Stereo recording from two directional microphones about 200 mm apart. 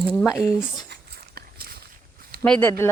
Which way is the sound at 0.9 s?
50° right (ahead or behind).